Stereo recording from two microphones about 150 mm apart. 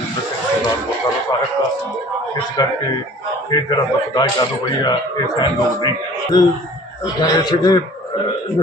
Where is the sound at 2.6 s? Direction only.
25° left (ahead or behind).